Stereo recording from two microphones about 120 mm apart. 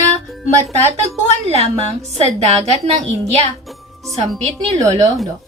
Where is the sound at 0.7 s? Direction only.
60° right (ahead or behind).